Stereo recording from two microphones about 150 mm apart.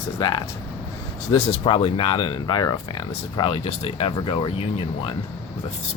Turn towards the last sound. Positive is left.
turn(degrees=35)  # may be behind; listen again after turning